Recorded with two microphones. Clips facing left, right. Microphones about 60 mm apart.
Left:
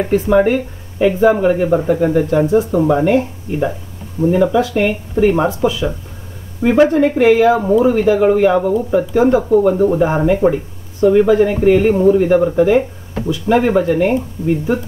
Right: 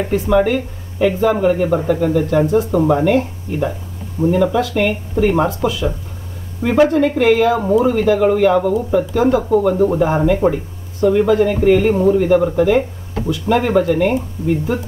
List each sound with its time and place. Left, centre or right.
0.1 s speech: centre
2.5 s speech: centre
3.0 s speech: centre
4.2 s speech: right
4.6 s speech: centre
11.9 s speech: centre
12.2 s speech: centre